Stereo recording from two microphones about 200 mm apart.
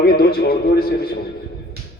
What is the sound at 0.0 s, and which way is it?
A man's voice, 50° left (ahead or behind).